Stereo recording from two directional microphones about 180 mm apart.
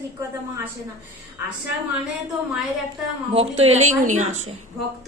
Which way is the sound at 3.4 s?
35° right (ahead or behind).